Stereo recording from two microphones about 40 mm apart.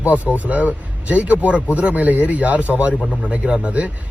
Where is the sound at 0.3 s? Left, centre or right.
Right.